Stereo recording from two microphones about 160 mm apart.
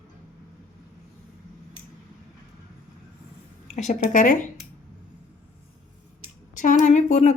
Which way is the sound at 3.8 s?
50° left (ahead or behind).